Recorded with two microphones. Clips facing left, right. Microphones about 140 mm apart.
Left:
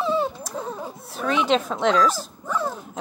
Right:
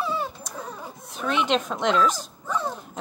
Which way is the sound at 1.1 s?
Centre (ahead or behind).